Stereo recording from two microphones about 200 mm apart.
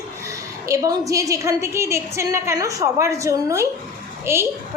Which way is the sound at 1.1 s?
15° right (ahead or behind).